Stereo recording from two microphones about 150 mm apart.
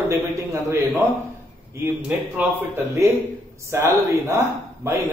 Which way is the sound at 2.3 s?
15° right (ahead or behind).